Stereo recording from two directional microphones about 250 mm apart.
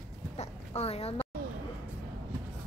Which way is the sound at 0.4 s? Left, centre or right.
Left.